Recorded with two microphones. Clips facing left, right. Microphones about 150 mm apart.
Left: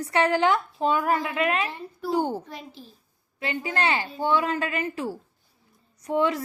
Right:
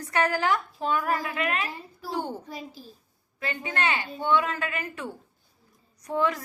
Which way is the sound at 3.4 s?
30° left (ahead or behind).